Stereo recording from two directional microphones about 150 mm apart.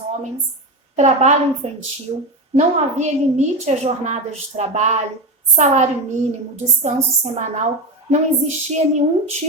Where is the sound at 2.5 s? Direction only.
50° right (ahead or behind).